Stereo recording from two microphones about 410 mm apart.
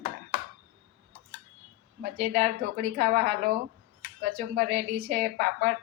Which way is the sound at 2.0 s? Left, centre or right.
Right.